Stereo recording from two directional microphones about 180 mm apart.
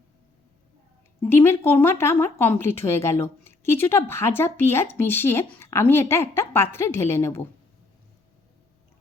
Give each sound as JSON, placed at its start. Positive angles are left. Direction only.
{"t": 1.2, "sound": "a woman's voice", "side_deg": 15}